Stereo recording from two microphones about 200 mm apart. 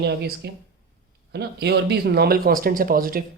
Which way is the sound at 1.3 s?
55° right (ahead or behind).